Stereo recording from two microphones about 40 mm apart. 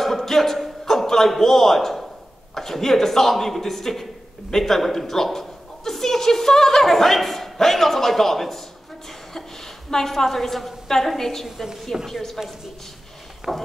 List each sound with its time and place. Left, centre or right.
0.0 s a sound: centre
2.5 s a man's voice: centre
9.8 s a man's voice: centre
11.4 s a woman's voice: centre
12.1 s a man's voice: centre
13.4 s a woman's voice: centre